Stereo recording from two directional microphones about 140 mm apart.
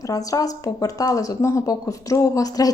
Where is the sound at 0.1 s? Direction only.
25° left (ahead or behind).